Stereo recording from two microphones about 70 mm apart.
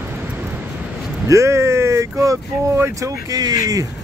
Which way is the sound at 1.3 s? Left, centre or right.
Right.